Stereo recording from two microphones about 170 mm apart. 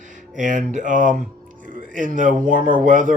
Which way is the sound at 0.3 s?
50° right (ahead or behind).